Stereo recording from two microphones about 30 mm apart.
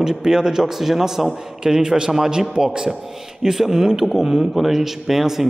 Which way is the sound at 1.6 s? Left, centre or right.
Right.